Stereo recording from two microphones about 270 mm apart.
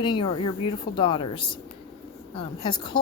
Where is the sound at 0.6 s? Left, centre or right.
Centre.